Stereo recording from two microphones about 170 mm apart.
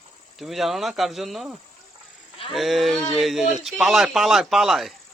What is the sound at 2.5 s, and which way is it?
A man's voice, centre (ahead or behind).